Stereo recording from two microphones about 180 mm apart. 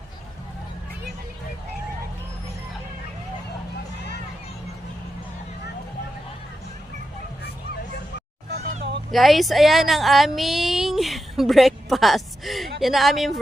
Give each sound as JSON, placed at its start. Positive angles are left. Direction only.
{"t": 8.4, "sound": "music", "side_deg": -60}
{"t": 9.1, "sound": "a woman's voice", "side_deg": 0}